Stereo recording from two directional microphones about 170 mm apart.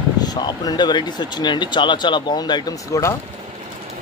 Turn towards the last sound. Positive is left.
turn(degrees=20)  # may be behind; listen again after turning